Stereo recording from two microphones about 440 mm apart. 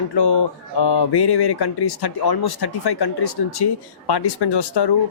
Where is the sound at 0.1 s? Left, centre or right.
Left.